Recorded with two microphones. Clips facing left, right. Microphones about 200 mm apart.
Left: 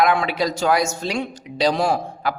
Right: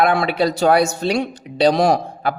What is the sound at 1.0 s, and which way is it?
Speech, 60° right (ahead or behind).